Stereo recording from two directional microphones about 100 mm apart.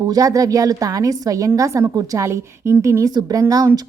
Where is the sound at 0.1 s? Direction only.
35° right (ahead or behind).